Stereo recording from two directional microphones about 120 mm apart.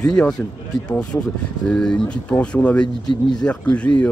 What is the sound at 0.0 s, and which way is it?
Speech, 5° left (ahead or behind).